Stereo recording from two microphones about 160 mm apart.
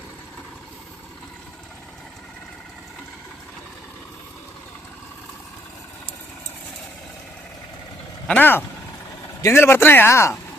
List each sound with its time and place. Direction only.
8.3 s speech: 10° left (ahead or behind)